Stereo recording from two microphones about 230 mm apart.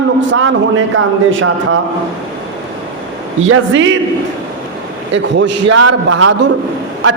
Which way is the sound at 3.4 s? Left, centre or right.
Right.